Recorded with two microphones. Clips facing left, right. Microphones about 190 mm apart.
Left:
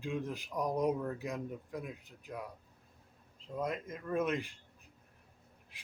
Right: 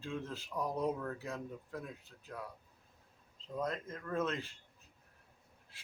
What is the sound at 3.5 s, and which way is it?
Speech, 10° left (ahead or behind).